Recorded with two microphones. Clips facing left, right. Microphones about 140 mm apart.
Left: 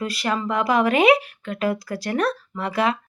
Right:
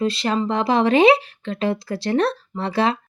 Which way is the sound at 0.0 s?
25° right (ahead or behind).